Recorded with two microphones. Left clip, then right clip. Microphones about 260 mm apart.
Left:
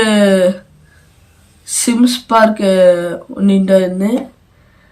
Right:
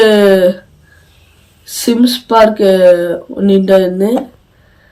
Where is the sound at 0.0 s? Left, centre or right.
Centre.